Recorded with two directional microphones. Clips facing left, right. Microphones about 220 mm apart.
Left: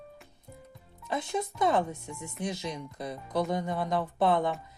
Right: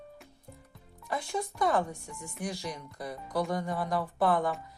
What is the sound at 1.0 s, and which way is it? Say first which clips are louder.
Speech: left 2 dB; 20° left (ahead or behind).